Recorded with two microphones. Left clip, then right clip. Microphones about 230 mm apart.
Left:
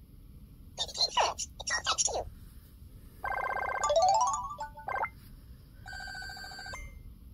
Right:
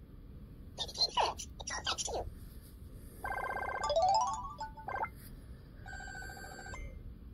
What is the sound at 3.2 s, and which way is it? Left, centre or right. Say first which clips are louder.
Music: left 5 dB; left.